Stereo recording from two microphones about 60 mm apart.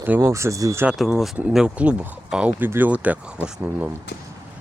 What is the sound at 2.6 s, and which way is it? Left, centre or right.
Speech, right.